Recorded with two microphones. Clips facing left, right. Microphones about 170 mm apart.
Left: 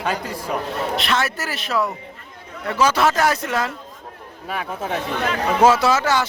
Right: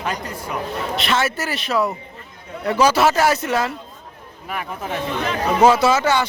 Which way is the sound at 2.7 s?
15° right (ahead or behind).